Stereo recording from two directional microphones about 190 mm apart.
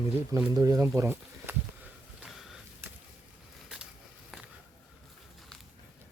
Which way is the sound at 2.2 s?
Centre (ahead or behind).